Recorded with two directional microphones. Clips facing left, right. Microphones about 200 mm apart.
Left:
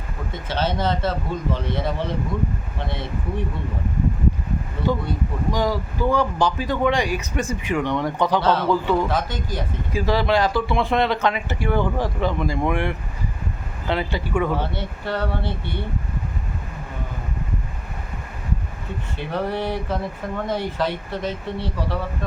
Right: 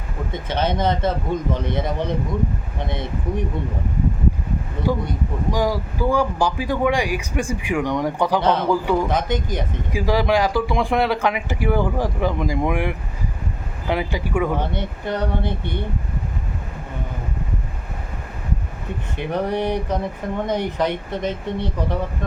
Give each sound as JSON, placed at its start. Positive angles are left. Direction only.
{"t": 0.3, "sound": "speech", "side_deg": -20}
{"t": 4.9, "sound": "speech", "side_deg": -10}
{"t": 19.1, "sound": "speech", "side_deg": -15}